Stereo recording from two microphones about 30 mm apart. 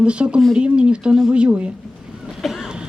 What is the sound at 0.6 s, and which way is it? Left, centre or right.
Speech, right.